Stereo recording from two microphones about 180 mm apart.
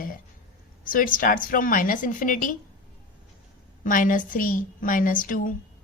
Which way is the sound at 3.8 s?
50° left (ahead or behind).